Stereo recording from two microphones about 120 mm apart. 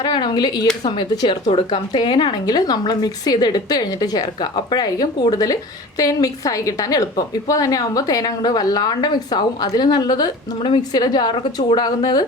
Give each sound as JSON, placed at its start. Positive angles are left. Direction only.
{"t": 0.0, "sound": "a woman's voice", "side_deg": 40}